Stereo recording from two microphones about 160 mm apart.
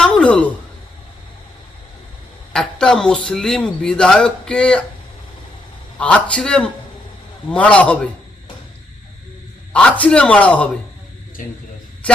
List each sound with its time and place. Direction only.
0.0 s a sound: 5° left (ahead or behind)
2.5 s a man's voice: 5° left (ahead or behind)
6.0 s a man's voice: 5° left (ahead or behind)
9.7 s a man's voice: 5° left (ahead or behind)